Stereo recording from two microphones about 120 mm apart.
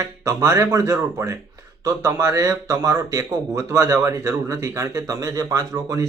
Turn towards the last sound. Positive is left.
turn(degrees=-25)  # may be behind; listen again after turning